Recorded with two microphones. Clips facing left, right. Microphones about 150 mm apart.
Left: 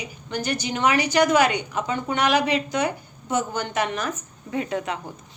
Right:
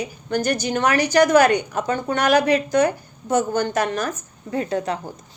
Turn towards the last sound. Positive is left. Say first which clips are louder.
# right 3 dB
turn(degrees=-35)  # may be behind; listen again after turning